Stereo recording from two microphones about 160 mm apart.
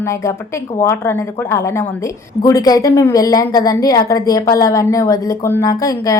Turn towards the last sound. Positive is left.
turn(degrees=20)  # may be behind; listen again after turning